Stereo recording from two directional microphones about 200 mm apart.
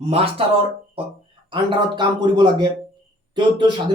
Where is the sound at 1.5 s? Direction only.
20° right (ahead or behind).